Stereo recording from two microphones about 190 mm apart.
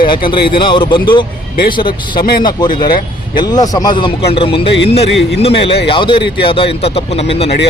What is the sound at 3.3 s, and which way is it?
A man's voice, 20° left (ahead or behind).